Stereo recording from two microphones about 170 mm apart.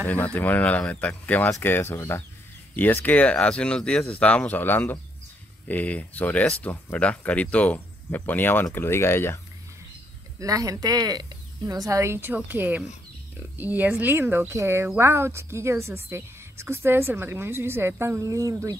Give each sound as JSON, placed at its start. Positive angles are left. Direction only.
{"t": 0.0, "sound": "speech", "side_deg": 10}
{"t": 10.4, "sound": "a woman's voice", "side_deg": -20}